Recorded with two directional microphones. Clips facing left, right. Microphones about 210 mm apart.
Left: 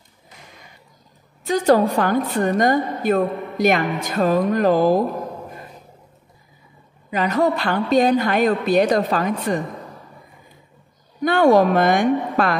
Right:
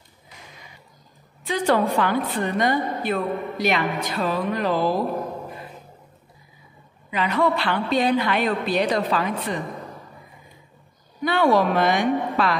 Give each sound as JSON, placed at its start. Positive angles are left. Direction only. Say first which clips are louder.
{"t": 1.4, "sound": "a woman's voice", "louder": "left 5 dB", "side_deg": 40}
{"t": 7.1, "sound": "a woman's voice", "louder": "left 3 dB", "side_deg": 45}
{"t": 11.2, "sound": "a woman's voice", "louder": "left 5 dB", "side_deg": 45}